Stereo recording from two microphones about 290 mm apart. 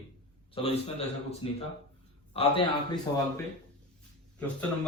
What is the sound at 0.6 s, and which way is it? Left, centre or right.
A man's voice, centre.